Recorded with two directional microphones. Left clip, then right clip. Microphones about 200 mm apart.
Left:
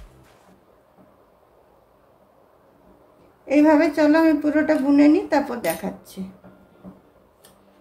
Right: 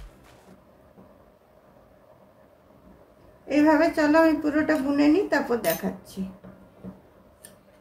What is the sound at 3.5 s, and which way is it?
A woman's voice, 35° left (ahead or behind).